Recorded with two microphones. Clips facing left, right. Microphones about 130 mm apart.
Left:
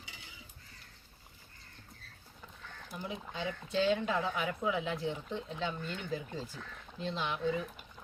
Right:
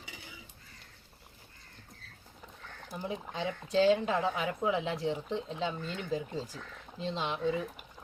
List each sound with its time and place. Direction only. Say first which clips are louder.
2.9 s speech: right 4 dB; 35° right (ahead or behind)